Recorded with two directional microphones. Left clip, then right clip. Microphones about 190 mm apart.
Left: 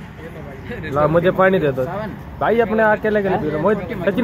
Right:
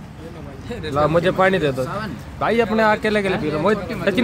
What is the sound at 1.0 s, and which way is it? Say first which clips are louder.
Speech: left 2 dB; 15° right (ahead or behind).